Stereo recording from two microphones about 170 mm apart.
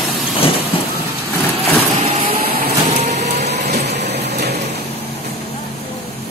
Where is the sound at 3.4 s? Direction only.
75° right (ahead or behind).